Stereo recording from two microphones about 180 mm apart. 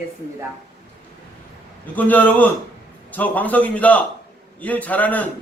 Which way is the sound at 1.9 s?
10° left (ahead or behind).